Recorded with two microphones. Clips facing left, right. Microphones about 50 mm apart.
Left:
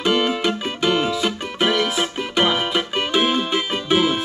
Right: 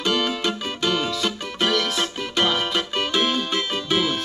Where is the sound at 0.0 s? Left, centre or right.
Centre.